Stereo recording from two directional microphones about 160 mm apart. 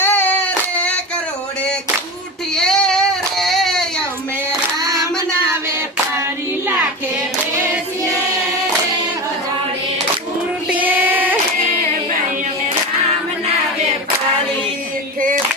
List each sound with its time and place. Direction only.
0.0 s child singing: 15° left (ahead or behind)
2.6 s child singing: 5° left (ahead or behind)
4.9 s child singing: 20° right (ahead or behind)
10.7 s child singing: 10° right (ahead or behind)